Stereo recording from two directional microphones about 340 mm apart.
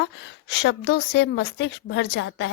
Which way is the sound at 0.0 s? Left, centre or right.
Left.